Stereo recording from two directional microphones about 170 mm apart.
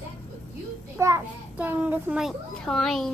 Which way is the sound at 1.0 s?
15° right (ahead or behind).